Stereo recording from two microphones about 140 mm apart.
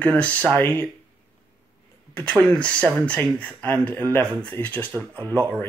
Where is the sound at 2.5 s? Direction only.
10° left (ahead or behind).